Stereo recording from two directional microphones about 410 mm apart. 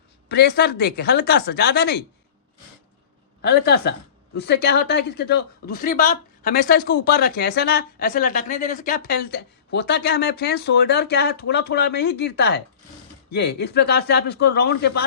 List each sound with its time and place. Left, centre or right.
0.3 s speech: left
3.4 s speech: left